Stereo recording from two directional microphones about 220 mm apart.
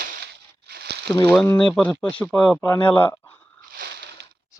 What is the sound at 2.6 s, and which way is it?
Speech, 20° left (ahead or behind).